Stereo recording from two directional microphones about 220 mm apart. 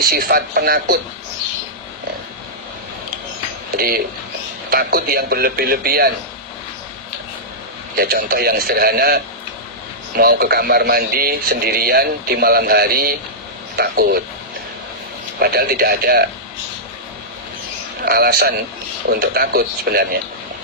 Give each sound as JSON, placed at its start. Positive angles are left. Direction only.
{"t": 0.0, "sound": "a man's voice", "side_deg": -45}
{"t": 3.8, "sound": "a man's voice", "side_deg": -45}
{"t": 7.9, "sound": "a man's voice", "side_deg": -45}
{"t": 15.4, "sound": "a man's voice", "side_deg": -45}
{"t": 18.0, "sound": "a man's voice", "side_deg": -45}